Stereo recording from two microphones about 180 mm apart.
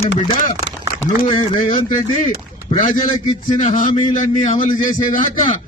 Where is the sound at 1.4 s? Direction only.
45° left (ahead or behind).